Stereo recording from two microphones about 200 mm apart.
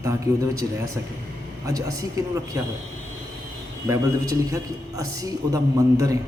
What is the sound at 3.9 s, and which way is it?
A man's voice, 15° right (ahead or behind).